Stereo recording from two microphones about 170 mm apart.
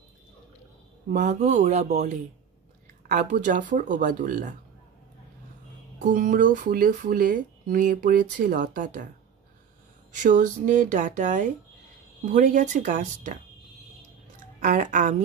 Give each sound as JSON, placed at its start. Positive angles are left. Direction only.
{"t": 1.1, "sound": "speech", "side_deg": -50}
{"t": 5.9, "sound": "speech", "side_deg": -50}
{"t": 10.1, "sound": "speech", "side_deg": -50}
{"t": 14.6, "sound": "speech", "side_deg": -50}